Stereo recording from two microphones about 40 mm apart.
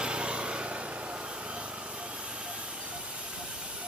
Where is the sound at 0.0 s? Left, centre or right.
Right.